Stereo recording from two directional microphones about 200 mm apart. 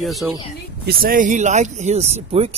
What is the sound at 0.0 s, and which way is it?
Speech, centre (ahead or behind).